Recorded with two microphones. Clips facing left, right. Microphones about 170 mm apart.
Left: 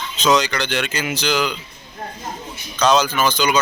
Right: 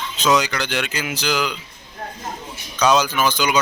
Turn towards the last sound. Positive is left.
turn(degrees=-10)  # may be behind; listen again after turning